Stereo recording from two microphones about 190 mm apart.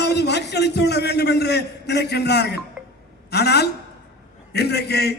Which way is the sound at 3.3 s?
60° left (ahead or behind).